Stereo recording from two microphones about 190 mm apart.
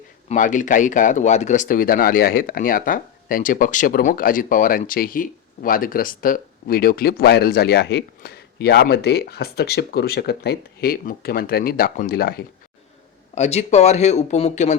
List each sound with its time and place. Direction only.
0.3 s speech: 40° left (ahead or behind)
13.3 s speech: 35° left (ahead or behind)